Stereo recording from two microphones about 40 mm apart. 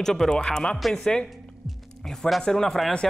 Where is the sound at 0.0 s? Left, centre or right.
Centre.